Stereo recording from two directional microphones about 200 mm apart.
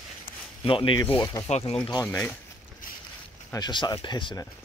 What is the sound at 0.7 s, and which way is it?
Speech, 25° left (ahead or behind).